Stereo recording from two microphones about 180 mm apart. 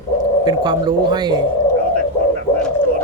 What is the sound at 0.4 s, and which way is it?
Speech, 25° right (ahead or behind).